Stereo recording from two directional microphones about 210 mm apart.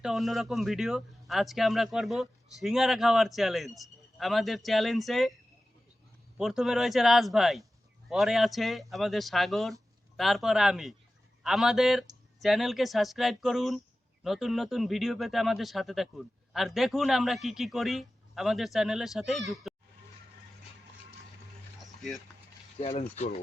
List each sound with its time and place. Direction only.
0.0 s speech: centre (ahead or behind)
6.3 s speech: centre (ahead or behind)
22.8 s speech: 30° left (ahead or behind)